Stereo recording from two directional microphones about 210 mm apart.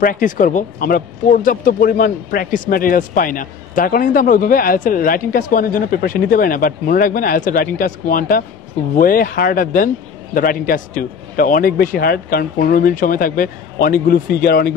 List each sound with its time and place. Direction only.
0.0 s a man's voice: 40° left (ahead or behind)